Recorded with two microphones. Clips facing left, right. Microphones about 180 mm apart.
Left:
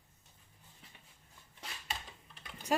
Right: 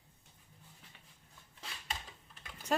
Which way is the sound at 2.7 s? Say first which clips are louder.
Left 1 dB; 10° left (ahead or behind).